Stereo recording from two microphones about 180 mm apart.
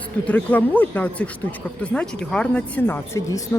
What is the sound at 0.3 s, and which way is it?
A woman's voice, 10° left (ahead or behind).